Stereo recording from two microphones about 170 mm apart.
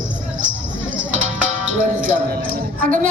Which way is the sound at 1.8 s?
50° right (ahead or behind).